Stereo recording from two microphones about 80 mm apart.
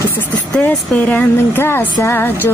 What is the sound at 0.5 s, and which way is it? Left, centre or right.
Speech, centre.